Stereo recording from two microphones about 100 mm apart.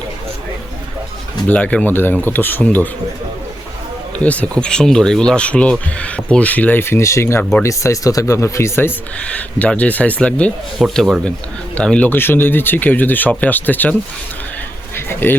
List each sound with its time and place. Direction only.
1.5 s speech: 15° left (ahead or behind)
4.2 s speech: 15° left (ahead or behind)
9.2 s speech: 10° left (ahead or behind)
10.8 s speech: centre (ahead or behind); by 13.9 s 20° left (ahead or behind)
14.9 s speech: 20° left (ahead or behind)